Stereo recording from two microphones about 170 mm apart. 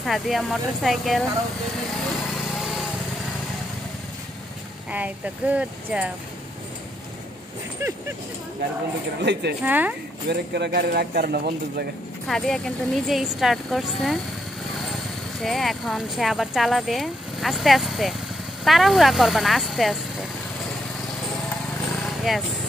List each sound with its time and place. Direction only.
0.0 s speech: centre (ahead or behind)
2.5 s lawn mower: centre (ahead or behind)
4.9 s speech: 10° right (ahead or behind)
7.8 s speech: 15° right (ahead or behind)
9.2 s speech: 80° right
9.6 s speech: 10° right (ahead or behind)
10.2 s speech: 75° right (ahead or behind)
12.3 s speech: 5° left (ahead or behind)
15.4 s speech: centre (ahead or behind)
22.3 s speech: centre (ahead or behind)